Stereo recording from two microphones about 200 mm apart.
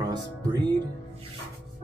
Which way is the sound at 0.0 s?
20° right (ahead or behind).